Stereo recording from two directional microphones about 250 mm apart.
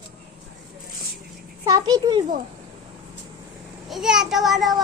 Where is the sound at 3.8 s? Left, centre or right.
Centre.